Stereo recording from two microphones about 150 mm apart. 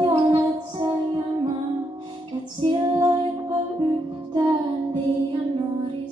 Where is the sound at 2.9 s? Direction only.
25° right (ahead or behind).